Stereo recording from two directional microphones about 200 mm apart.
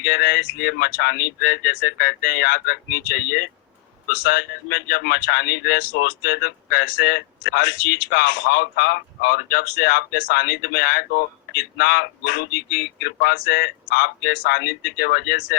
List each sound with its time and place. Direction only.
0.0 s speech: 50° left (ahead or behind)